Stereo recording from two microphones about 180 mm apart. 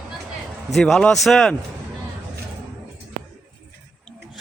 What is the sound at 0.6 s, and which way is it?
Speech, centre (ahead or behind).